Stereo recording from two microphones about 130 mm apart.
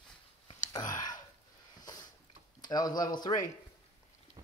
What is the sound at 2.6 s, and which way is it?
Speech, 30° left (ahead or behind).